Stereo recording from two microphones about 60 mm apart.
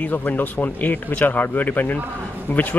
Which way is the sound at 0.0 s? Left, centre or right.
Left.